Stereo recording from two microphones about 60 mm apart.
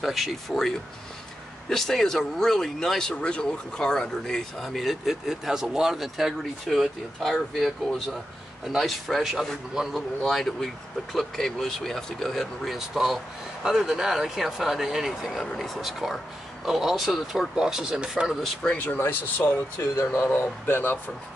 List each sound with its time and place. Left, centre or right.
0.0 s speech: centre
17.6 s speech: centre
18.7 s speech: left
18.9 s speech: left